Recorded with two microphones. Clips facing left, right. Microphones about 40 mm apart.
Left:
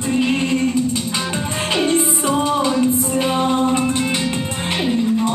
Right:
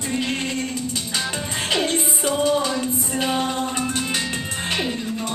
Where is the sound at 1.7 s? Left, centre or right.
Centre.